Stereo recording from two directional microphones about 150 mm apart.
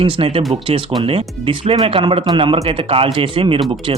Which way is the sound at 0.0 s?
40° right (ahead or behind).